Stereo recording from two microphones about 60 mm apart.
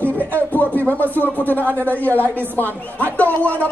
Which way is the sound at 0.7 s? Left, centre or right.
Left.